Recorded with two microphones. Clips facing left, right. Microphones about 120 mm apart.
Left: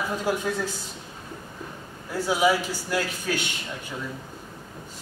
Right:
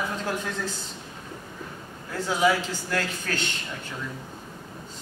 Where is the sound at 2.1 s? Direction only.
10° left (ahead or behind).